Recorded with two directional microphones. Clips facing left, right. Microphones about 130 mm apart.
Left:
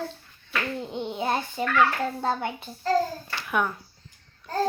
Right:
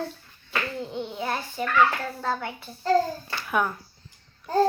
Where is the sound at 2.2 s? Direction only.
20° left (ahead or behind).